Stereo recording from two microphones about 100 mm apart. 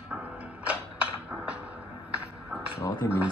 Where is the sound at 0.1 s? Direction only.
15° right (ahead or behind).